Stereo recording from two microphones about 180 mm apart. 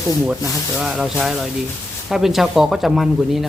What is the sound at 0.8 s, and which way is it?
Speech, 5° right (ahead or behind).